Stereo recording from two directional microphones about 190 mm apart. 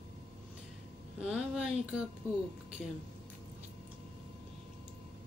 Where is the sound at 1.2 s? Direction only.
5° right (ahead or behind).